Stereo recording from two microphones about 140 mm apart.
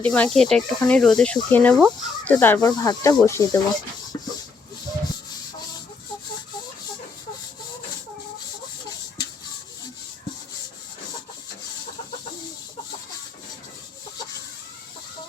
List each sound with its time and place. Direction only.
0.0 s speech: 10° left (ahead or behind)
2.6 s speech: 30° left (ahead or behind)